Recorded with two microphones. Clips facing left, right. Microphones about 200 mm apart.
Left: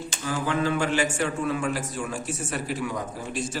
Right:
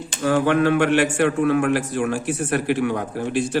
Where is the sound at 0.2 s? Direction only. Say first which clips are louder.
Right 9 dB; 65° right (ahead or behind).